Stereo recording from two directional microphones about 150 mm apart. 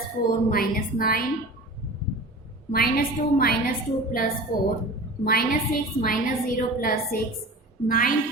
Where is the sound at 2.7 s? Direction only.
75° left (ahead or behind).